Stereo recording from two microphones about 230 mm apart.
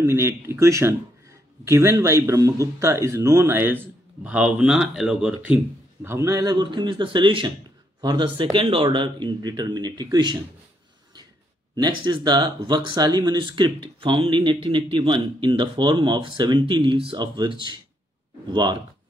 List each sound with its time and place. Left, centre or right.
0.0 s speech: centre
11.7 s speech: centre